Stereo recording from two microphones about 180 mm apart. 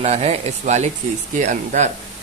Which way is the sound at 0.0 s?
35° right (ahead or behind).